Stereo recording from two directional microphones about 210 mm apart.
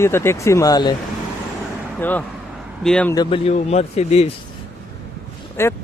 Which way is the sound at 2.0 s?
10° left (ahead or behind).